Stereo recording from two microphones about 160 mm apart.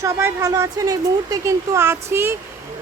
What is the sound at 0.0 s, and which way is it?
Speech, 20° right (ahead or behind).